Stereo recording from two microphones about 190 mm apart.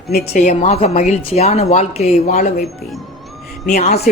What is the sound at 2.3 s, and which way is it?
Speech, 50° left (ahead or behind).